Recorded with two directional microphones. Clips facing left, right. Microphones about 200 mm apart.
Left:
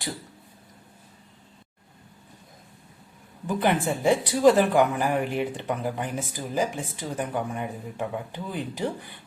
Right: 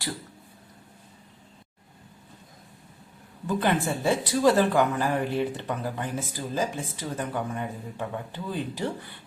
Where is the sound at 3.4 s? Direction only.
15° left (ahead or behind).